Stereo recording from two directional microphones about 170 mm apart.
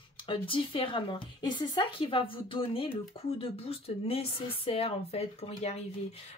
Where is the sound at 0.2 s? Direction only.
30° left (ahead or behind).